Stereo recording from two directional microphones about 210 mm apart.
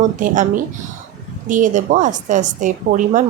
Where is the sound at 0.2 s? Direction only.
40° right (ahead or behind).